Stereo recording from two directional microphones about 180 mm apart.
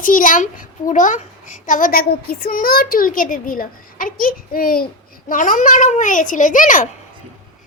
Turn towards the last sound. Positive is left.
turn(degrees=45)  # may be behind; listen again after turning